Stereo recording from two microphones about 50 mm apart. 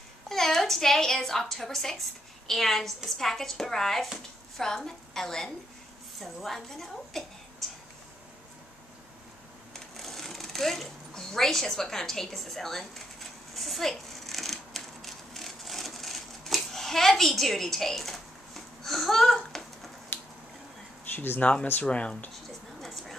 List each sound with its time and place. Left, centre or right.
0.3 s a woman's voice: centre
9.9 s sewing machine: centre
20.1 s finger snapping: left
21.0 s a sound: left
21.4 s speech: left
22.3 s a sound: centre